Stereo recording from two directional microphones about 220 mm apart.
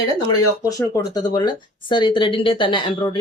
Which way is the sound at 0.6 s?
15° left (ahead or behind).